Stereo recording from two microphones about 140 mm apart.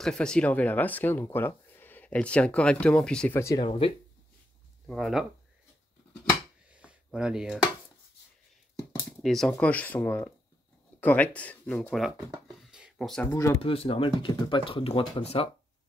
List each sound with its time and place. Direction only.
0.0 s speech: 5° left (ahead or behind)
3.3 s speech: 20° left (ahead or behind)
3.6 s speech: 40° left (ahead or behind)
4.8 s speech: centre (ahead or behind)
6.7 s a sound: 10° right (ahead or behind)
7.1 s speech: 5° right (ahead or behind)
9.2 s speech: centre (ahead or behind)
12.6 s a sound: 5° right (ahead or behind)
12.9 s speech: 5° left (ahead or behind)
13.3 s speech: 20° left (ahead or behind)
13.6 s speech: 40° left (ahead or behind)